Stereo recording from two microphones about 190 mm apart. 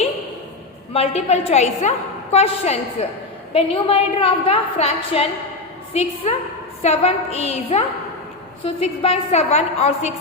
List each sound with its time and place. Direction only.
0.9 s a woman's voice: 30° left (ahead or behind)